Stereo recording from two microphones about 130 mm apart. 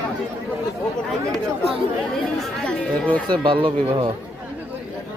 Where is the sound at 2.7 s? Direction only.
10° left (ahead or behind).